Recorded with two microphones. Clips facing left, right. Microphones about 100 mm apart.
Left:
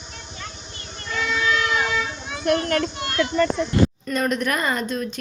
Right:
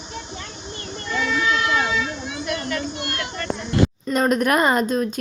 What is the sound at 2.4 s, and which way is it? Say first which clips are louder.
Speech: left 7 dB; 55° left (ahead or behind).